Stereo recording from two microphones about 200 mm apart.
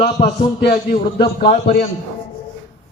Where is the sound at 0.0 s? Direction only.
40° left (ahead or behind).